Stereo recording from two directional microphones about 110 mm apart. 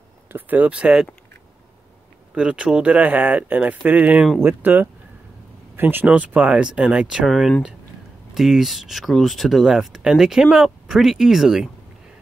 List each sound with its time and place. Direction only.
0.3 s speech: 15° right (ahead or behind)
2.3 s speech: 10° right (ahead or behind)